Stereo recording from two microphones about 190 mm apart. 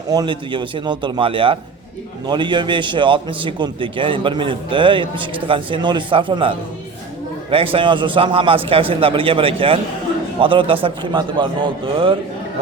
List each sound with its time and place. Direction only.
0.1 s a man's voice: 25° right (ahead or behind)